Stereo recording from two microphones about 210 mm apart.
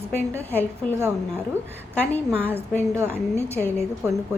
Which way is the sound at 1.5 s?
10° right (ahead or behind).